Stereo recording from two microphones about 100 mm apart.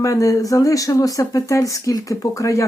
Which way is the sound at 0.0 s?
35° left (ahead or behind).